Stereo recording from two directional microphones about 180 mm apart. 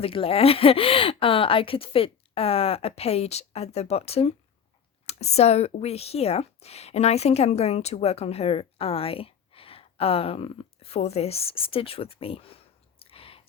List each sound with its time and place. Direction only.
0.0 s speech: 30° left (ahead or behind)